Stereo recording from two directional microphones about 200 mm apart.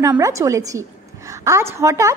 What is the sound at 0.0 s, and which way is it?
A woman's voice, 15° right (ahead or behind).